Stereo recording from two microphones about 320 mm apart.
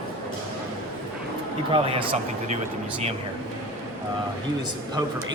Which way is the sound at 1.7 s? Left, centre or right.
Centre.